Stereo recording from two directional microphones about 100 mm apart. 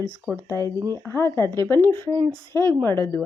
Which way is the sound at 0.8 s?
35° right (ahead or behind).